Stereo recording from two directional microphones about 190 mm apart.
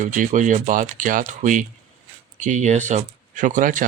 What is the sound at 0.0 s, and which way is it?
Speech, 40° right (ahead or behind).